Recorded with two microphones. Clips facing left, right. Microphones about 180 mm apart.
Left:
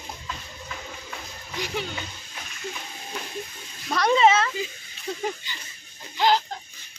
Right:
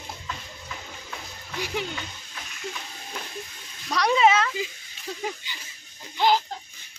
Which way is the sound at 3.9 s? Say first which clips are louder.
Left 1 dB; centre (ahead or behind).